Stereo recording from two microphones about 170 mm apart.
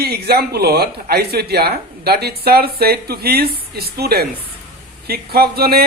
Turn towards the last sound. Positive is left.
turn(degrees=-65)  # may be behind; listen again after turning